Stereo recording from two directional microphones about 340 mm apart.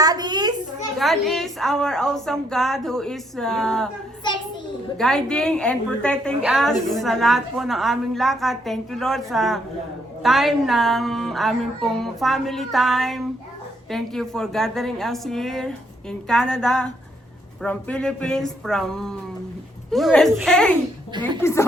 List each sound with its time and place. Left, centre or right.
0.0 s a sound: centre
0.9 s speech: centre
4.9 s a woman's voice: centre